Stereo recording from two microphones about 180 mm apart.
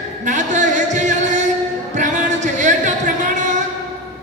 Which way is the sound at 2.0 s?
40° right (ahead or behind).